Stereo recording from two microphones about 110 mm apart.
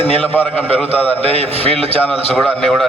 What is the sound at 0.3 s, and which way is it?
Speech, 15° left (ahead or behind).